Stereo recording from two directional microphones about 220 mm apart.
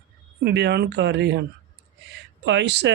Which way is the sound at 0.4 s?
50° right (ahead or behind).